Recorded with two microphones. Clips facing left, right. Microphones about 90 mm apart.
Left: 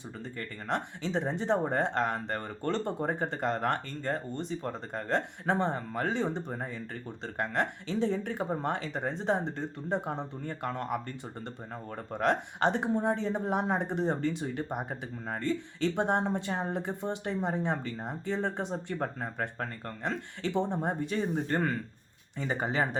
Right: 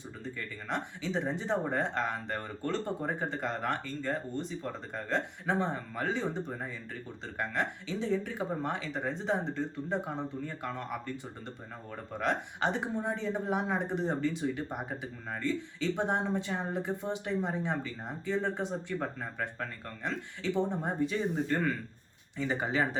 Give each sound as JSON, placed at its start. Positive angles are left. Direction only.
{"t": 0.3, "sound": "speech", "side_deg": 50}
{"t": 12.1, "sound": "speech", "side_deg": 55}
{"t": 20.8, "sound": "speech", "side_deg": 50}